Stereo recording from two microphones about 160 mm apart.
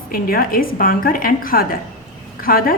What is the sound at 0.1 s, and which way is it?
A woman's voice, 65° left (ahead or behind).